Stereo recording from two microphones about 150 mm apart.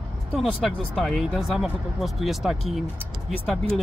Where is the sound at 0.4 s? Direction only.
Centre (ahead or behind).